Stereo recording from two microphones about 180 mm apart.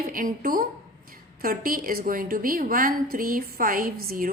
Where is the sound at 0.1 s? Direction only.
50° right (ahead or behind).